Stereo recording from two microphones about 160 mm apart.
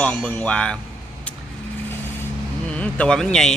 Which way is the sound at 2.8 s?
5° left (ahead or behind).